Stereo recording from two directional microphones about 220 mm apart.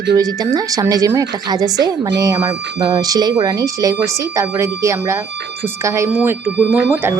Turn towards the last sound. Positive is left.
turn(degrees=-10)  # may be behind; listen again after turning